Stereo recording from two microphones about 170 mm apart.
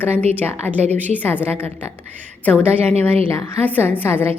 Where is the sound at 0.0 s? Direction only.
10° left (ahead or behind).